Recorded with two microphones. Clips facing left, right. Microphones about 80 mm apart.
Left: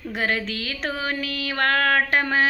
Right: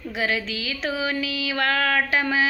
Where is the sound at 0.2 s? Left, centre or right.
Left.